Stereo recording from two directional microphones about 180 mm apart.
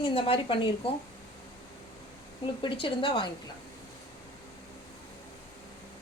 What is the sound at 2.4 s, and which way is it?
Speech, 25° left (ahead or behind).